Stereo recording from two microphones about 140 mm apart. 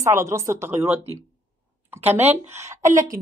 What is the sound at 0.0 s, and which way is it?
A man's voice, 20° right (ahead or behind).